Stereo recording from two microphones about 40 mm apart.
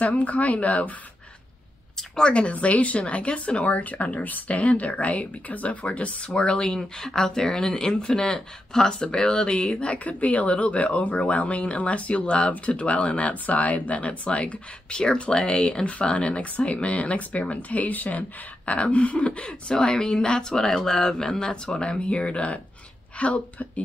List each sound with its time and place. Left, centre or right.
0.0 s speech: left
2.0 s speech: left
6.3 s a woman's voice: left